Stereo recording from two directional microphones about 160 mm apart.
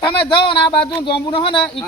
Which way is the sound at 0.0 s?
30° left (ahead or behind).